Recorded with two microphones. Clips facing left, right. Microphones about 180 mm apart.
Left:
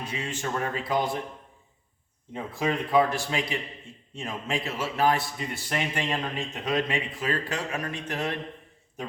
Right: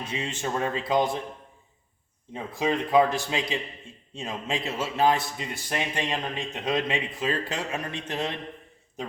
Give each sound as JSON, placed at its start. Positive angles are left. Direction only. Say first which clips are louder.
{"t": 0.0, "sound": "a man's voice", "louder": "right 1 dB", "side_deg": -20}
{"t": 2.3, "sound": "a man's voice", "louder": "right 1 dB", "side_deg": -20}